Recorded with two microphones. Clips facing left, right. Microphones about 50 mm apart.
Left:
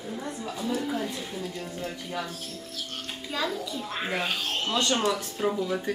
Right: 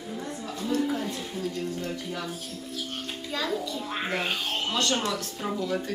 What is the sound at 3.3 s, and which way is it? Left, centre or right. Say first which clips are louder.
Speech: even; centre.